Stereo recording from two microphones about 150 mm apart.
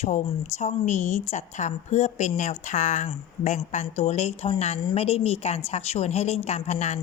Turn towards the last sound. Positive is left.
turn(degrees=50)  # may be behind; listen again after turning